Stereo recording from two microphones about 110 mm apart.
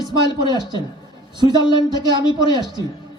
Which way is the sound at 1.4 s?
40° right (ahead or behind).